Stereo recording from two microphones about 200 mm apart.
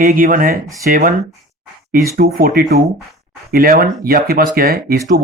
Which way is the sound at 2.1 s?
45° right (ahead or behind).